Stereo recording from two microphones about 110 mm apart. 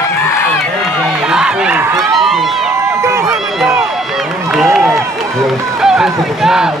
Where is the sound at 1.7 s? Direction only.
20° right (ahead or behind).